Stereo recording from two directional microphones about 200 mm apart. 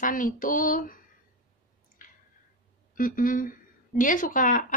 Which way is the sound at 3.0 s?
45° left (ahead or behind).